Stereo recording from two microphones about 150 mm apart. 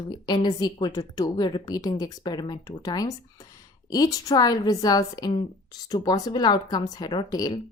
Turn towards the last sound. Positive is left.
turn(degrees=25)  # may be behind; listen again after turning